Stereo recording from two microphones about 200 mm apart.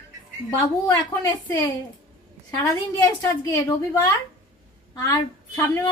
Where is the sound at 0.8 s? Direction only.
15° left (ahead or behind).